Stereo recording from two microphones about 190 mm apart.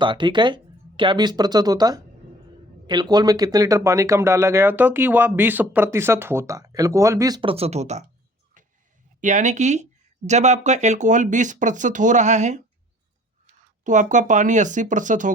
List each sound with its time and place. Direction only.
0.0 s speech: 25° right (ahead or behind)
8.6 s a sound: 40° right (ahead or behind)
9.2 s speech: 40° right (ahead or behind)
13.8 s speech: 40° right (ahead or behind)